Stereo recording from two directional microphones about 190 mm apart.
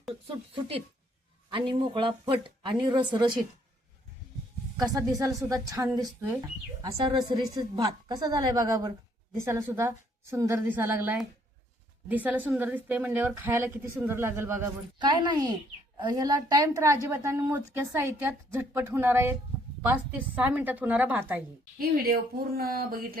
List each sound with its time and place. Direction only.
0.1 s a sound: 25° right (ahead or behind)
1.5 s a woman's voice: 25° right (ahead or behind)
4.8 s a woman's voice: 20° right (ahead or behind)
7.0 s a woman's voice: 25° right (ahead or behind)
14.9 s a woman's voice: 25° right (ahead or behind)
21.8 s speech: 50° right (ahead or behind)